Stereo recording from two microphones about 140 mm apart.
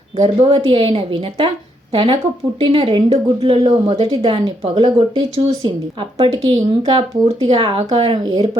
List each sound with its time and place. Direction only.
0.2 s a woman's voice: 40° right (ahead or behind)